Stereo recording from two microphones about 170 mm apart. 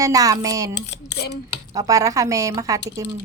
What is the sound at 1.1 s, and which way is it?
Speech, 75° left (ahead or behind).